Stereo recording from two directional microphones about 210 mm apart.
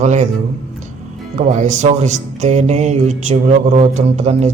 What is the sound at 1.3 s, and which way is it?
Speech, 35° right (ahead or behind).